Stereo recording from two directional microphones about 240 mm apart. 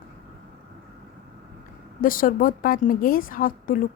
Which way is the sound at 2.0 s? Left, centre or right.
Left.